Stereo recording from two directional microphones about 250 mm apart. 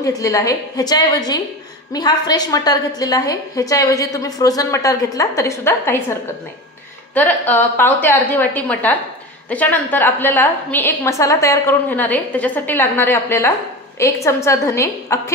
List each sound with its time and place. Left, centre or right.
0.0 s a woman's voice: centre
7.2 s a woman's voice: centre